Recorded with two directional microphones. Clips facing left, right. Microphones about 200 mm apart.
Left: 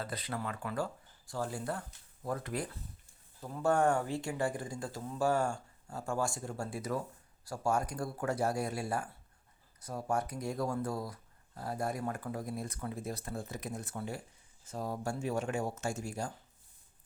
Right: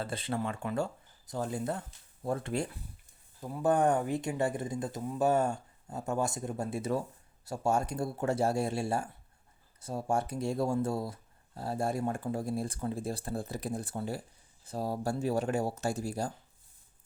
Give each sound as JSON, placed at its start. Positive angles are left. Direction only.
{"t": 0.0, "sound": "speech", "side_deg": -25}
{"t": 3.4, "sound": "speech", "side_deg": -15}